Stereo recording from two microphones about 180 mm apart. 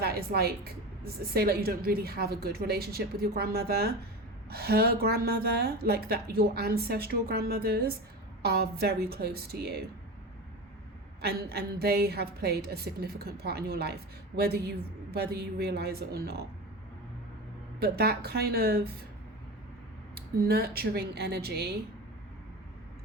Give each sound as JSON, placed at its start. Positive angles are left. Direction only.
{"t": 0.0, "sound": "a woman's voice", "side_deg": -60}
{"t": 11.2, "sound": "a woman's voice", "side_deg": -60}
{"t": 17.7, "sound": "a woman's voice", "side_deg": -60}
{"t": 20.1, "sound": "a woman's voice", "side_deg": -60}